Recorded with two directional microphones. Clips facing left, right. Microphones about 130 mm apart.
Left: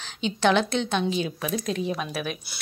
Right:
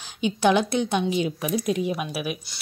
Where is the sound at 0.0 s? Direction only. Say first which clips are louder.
Right 2 dB; 15° right (ahead or behind).